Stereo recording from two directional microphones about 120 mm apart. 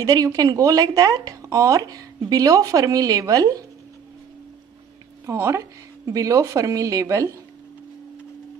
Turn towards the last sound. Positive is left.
turn(degrees=-30)  # may be behind; listen again after turning